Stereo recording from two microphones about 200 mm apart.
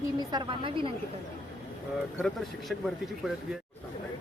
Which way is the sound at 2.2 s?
Centre (ahead or behind).